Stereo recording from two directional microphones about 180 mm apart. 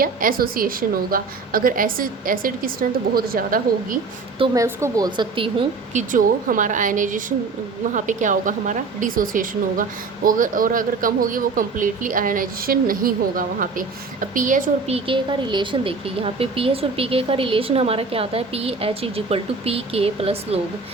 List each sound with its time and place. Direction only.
0.0 s speech: 50° right (ahead or behind)
4.5 s a woman's voice: 15° right (ahead or behind)
6.0 s speech: 50° right (ahead or behind)
14.9 s a woman's voice: 30° right (ahead or behind)